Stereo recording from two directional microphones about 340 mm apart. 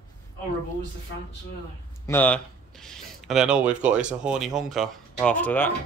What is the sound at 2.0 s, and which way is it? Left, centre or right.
Speech, centre.